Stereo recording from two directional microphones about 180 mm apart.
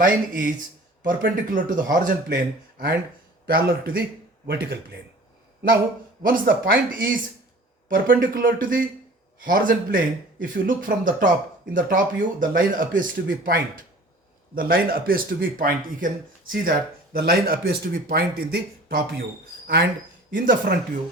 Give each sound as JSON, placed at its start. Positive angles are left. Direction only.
{"t": 0.0, "sound": "a man's voice", "side_deg": -50}
{"t": 6.2, "sound": "a man's voice", "side_deg": -50}